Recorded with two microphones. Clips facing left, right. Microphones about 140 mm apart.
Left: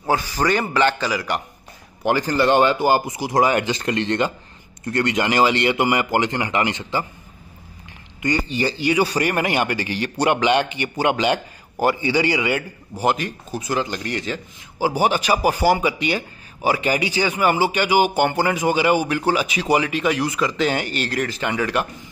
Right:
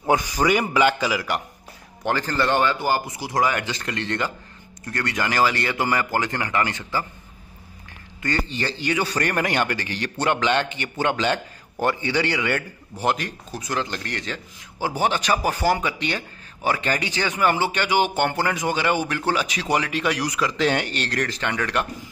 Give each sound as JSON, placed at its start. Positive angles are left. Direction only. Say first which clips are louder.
{"t": 0.1, "sound": "a man's voice", "louder": "even", "side_deg": -10}
{"t": 2.0, "sound": "speech", "louder": "left 5 dB", "side_deg": 15}
{"t": 8.2, "sound": "a man's voice", "louder": "left 4 dB", "side_deg": 15}